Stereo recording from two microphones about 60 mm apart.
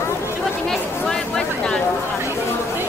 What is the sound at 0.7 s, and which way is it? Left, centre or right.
Chatter, centre.